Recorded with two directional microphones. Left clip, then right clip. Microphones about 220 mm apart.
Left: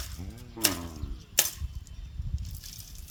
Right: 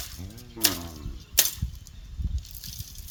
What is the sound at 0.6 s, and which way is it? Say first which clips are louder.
Bird: right 3 dB; 50° left (ahead or behind).